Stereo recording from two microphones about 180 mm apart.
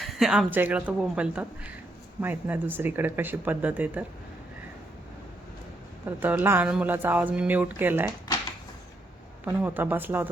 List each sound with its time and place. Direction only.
0.0 s speech: centre (ahead or behind)
6.1 s speech: 10° right (ahead or behind)
9.4 s speech: 10° right (ahead or behind)